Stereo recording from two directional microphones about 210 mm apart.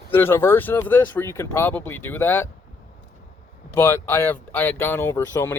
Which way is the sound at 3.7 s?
10° left (ahead or behind).